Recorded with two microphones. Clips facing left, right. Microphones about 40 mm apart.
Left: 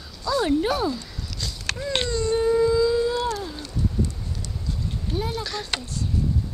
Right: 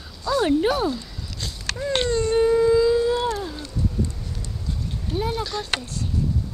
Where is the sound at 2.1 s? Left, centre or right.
Right.